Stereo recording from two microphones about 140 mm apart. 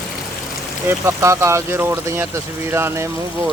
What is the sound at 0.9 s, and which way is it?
Speech, 20° right (ahead or behind).